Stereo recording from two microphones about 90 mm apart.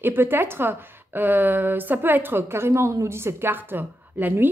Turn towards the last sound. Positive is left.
turn(degrees=-20)  # may be behind; listen again after turning